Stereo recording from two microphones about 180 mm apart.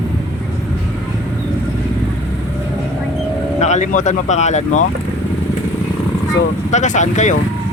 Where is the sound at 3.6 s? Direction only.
40° left (ahead or behind).